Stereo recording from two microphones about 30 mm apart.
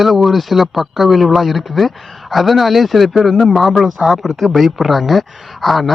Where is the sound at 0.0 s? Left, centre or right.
Centre.